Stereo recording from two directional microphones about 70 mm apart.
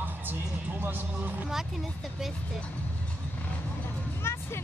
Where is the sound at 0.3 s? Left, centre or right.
Right.